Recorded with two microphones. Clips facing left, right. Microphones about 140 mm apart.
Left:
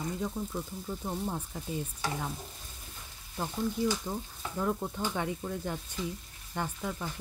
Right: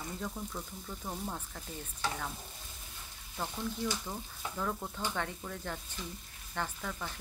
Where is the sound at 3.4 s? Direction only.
15° left (ahead or behind).